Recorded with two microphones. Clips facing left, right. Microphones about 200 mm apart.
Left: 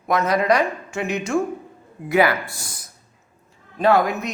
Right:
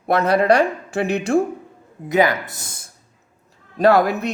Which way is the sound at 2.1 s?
20° right (ahead or behind).